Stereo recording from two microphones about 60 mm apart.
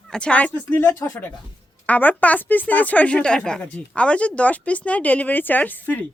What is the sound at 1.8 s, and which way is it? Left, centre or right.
A woman's voice, left.